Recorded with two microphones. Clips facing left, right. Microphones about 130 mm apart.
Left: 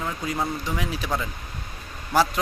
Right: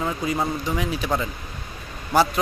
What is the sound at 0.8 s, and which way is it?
Speech, centre (ahead or behind).